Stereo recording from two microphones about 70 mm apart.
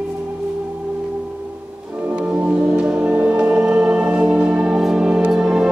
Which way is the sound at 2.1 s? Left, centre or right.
Centre.